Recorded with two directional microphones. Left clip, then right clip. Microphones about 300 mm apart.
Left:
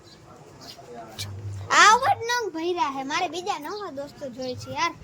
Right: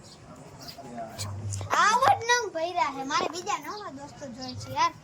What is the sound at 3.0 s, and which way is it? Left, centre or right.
Speech, left.